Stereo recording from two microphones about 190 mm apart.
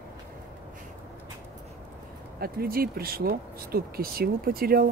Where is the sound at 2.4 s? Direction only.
50° right (ahead or behind).